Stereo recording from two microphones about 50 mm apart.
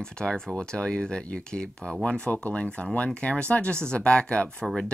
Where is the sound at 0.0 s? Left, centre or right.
Centre.